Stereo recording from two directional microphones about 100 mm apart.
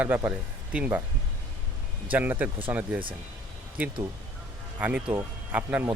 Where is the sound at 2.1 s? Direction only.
15° right (ahead or behind).